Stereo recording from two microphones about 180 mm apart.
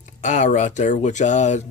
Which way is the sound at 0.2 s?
45° left (ahead or behind).